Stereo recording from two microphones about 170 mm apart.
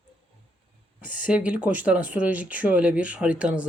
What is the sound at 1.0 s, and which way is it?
Speech, 10° right (ahead or behind).